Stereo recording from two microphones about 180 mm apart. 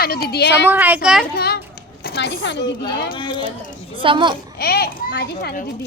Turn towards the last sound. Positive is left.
turn(degrees=60)  # may be behind; listen again after turning